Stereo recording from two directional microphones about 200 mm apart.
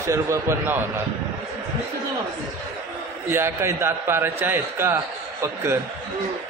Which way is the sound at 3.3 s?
10° right (ahead or behind).